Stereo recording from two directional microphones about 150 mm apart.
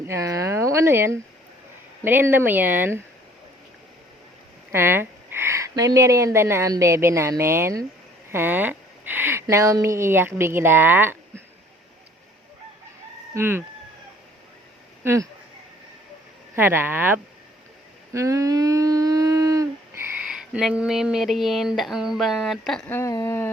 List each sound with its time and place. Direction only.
0.1 s speech: 20° right (ahead or behind)
4.7 s speech: 15° right (ahead or behind)
13.3 s speech: 15° right (ahead or behind)
15.0 s speech: 20° right (ahead or behind)
16.6 s speech: 15° right (ahead or behind)
18.1 s a sound: 20° right (ahead or behind)
20.2 s speech: 5° right (ahead or behind)
22.9 s a sound: 20° left (ahead or behind)